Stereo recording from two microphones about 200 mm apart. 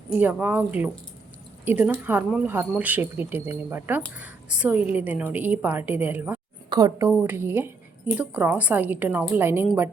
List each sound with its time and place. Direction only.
0.2 s speech: 10° right (ahead or behind)
6.7 s a woman's voice: 20° right (ahead or behind)